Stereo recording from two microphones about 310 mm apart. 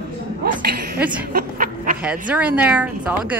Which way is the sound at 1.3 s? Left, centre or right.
Right.